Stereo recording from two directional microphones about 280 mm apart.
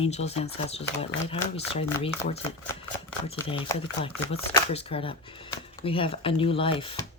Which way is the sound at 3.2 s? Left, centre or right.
Centre.